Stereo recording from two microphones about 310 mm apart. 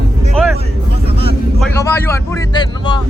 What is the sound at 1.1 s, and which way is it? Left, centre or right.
Vehicle, centre.